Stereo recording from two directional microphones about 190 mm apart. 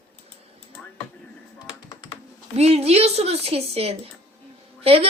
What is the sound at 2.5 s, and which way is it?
Speech, 35° right (ahead or behind).